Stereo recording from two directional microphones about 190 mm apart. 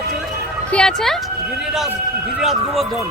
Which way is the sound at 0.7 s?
5° left (ahead or behind).